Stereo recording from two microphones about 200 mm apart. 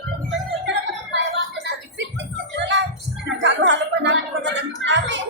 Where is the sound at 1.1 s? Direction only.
60° right (ahead or behind).